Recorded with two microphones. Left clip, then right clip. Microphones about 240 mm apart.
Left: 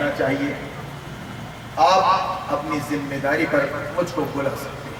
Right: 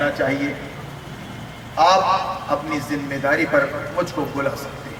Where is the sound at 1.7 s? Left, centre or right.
Centre.